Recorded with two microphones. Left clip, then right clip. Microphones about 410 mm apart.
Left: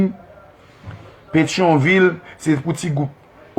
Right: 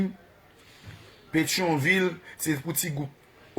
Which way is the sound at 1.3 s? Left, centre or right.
Right.